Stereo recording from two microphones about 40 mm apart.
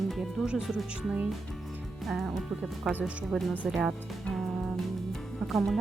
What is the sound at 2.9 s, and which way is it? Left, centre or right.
Speech, centre.